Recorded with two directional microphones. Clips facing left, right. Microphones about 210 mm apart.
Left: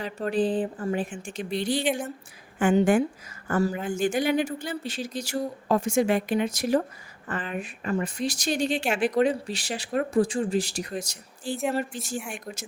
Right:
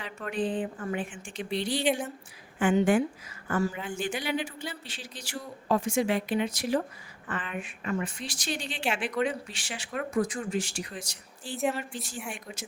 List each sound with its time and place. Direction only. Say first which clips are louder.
0.0 s a woman's voice: left 6 dB; 35° left (ahead or behind)